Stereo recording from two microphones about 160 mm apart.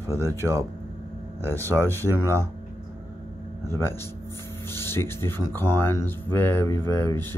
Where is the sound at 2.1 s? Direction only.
15° left (ahead or behind).